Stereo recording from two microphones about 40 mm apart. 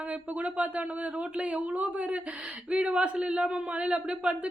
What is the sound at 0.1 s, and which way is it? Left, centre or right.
Speech, right.